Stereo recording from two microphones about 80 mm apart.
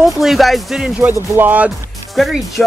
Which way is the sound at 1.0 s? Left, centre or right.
Right.